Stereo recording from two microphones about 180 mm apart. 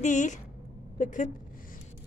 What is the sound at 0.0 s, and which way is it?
A woman's voice, 45° left (ahead or behind).